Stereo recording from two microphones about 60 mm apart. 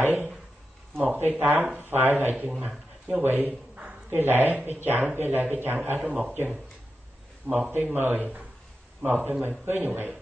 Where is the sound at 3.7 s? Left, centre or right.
Centre.